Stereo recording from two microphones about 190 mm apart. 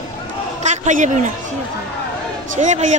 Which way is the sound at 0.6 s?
40° right (ahead or behind).